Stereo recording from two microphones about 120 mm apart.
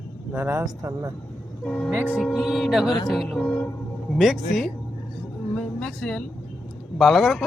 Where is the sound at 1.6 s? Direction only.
10° left (ahead or behind).